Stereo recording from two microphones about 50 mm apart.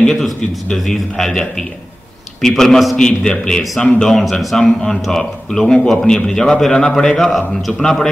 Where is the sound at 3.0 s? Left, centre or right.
Centre.